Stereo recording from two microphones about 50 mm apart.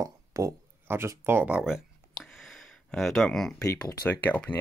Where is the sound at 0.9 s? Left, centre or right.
Right.